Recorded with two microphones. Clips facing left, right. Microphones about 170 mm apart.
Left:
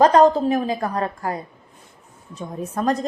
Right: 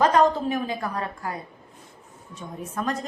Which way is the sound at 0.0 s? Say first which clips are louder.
Left 6 dB; 35° left (ahead or behind).